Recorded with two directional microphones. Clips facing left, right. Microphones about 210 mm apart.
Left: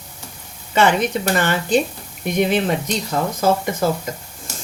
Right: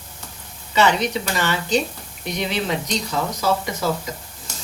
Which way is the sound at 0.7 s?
50° left (ahead or behind).